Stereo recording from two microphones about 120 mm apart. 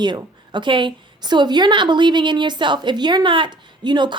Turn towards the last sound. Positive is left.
turn(degrees=-40)  # may be behind; listen again after turning